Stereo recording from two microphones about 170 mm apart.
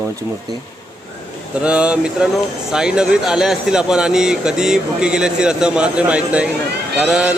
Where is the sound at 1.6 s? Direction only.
5° right (ahead or behind).